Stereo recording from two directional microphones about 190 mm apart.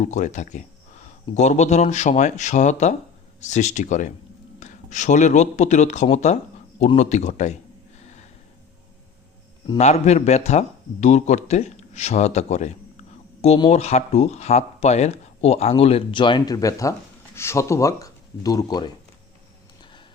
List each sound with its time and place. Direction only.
0.0 s speech: 40° left (ahead or behind)
8.0 s snort: 35° left (ahead or behind)
9.7 s speech: 35° left (ahead or behind)